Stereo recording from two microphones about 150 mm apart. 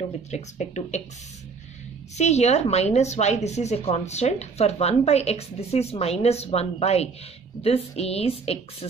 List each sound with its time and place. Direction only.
0.3 s a woman's voice: 50° left (ahead or behind)
2.1 s a woman's voice: 45° left (ahead or behind)